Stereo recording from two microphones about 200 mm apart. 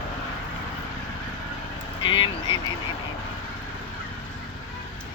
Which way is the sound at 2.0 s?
25° left (ahead or behind).